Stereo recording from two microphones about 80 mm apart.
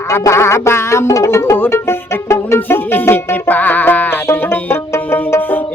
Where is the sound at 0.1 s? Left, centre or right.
Left.